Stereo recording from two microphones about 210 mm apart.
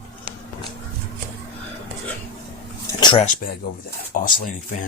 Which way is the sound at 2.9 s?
20° left (ahead or behind).